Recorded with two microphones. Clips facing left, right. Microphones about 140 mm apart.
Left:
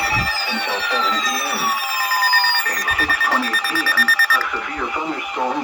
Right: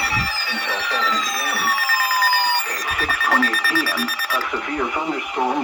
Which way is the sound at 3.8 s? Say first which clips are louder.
Left 1 dB; 15° right (ahead or behind).